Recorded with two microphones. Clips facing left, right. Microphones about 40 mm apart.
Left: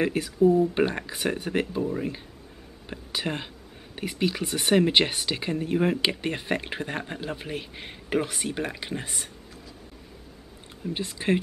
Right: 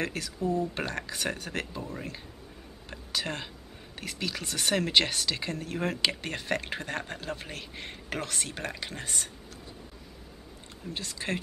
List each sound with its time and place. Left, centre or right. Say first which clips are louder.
0.0 s speech: left 10 dB; centre
10.9 s speech: left 8 dB; left